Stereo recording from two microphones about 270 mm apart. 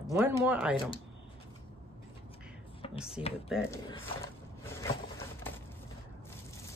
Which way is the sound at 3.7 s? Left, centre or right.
Centre.